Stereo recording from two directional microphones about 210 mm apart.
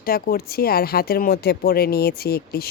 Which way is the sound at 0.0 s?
45° left (ahead or behind).